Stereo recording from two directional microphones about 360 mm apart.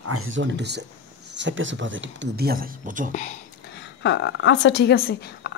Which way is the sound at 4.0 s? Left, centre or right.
Left.